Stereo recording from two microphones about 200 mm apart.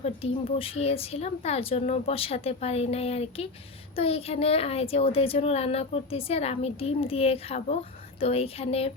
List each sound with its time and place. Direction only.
0.0 s a woman's voice: 30° left (ahead or behind)